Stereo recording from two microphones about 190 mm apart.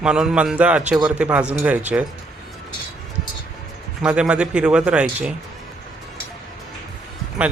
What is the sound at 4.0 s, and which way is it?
Speech, 5° right (ahead or behind).